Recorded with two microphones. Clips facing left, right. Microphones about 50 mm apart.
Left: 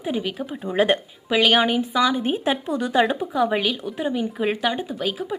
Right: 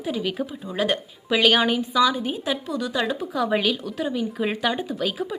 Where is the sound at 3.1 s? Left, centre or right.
Centre.